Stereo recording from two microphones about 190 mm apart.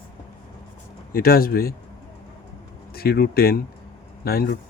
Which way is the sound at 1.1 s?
50° left (ahead or behind).